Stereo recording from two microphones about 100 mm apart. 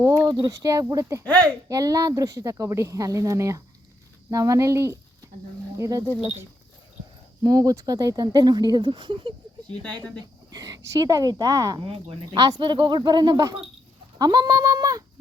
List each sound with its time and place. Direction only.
0.3 s speech: 35° right (ahead or behind)
7.4 s speech: 35° right (ahead or behind); by 9.3 s 55° right (ahead or behind)
10.2 s speech: 40° right (ahead or behind)
11.8 s speech: 60° right (ahead or behind)
12.4 s speech: 40° right (ahead or behind)